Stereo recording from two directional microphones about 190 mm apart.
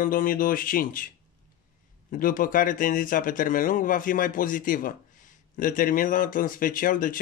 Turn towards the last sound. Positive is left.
turn(degrees=45)  # may be behind; listen again after turning